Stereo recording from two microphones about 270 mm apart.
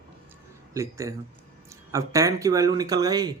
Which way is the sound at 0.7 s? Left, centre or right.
Centre.